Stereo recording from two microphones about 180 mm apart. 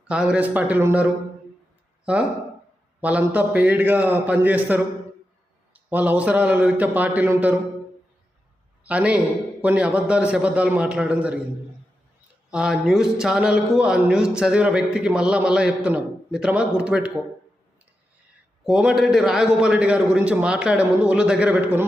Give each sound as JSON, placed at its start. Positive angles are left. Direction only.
{"t": 0.1, "sound": "a man's voice", "side_deg": -5}
{"t": 3.0, "sound": "a man's voice", "side_deg": -10}
{"t": 8.8, "sound": "a man's voice", "side_deg": -5}
{"t": 12.5, "sound": "speech", "side_deg": -5}
{"t": 18.6, "sound": "a man's voice", "side_deg": -5}